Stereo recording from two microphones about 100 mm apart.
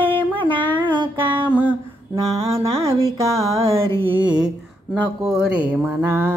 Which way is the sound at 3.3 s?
90° right.